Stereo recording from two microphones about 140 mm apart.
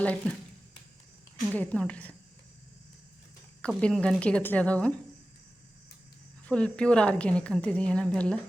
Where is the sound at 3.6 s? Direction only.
5° left (ahead or behind).